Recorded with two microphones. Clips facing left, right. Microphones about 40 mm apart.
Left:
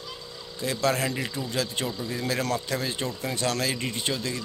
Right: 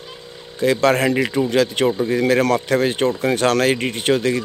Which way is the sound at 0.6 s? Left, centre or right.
Right.